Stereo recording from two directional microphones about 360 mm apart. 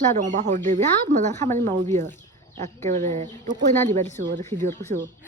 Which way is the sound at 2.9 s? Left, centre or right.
Centre.